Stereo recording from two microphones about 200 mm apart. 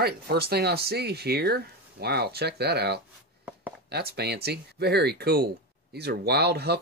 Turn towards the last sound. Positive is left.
turn(degrees=-55)  # may be behind; listen again after turning